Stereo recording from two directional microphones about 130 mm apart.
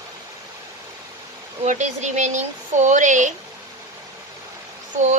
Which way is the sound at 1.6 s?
65° right (ahead or behind).